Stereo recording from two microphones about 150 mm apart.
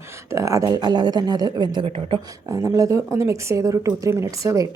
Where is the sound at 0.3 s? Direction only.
20° right (ahead or behind).